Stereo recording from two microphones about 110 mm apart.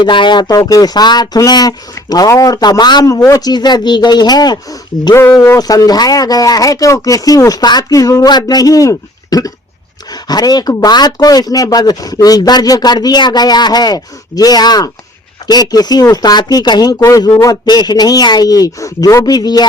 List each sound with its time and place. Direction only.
0.0 s speech: 45° left (ahead or behind)